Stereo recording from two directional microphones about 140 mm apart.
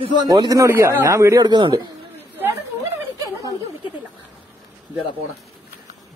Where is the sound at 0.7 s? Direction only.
15° right (ahead or behind); by 1.8 s 30° right (ahead or behind).